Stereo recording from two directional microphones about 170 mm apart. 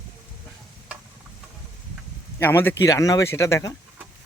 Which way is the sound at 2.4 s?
15° left (ahead or behind).